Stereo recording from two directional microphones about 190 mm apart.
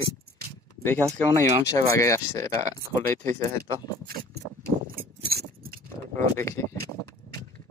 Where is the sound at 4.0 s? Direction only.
50° right (ahead or behind).